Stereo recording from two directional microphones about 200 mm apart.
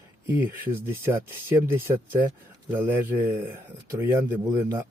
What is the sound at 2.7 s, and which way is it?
Speech, 10° right (ahead or behind).